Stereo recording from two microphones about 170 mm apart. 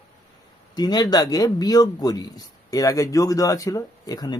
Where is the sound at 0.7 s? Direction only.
25° left (ahead or behind).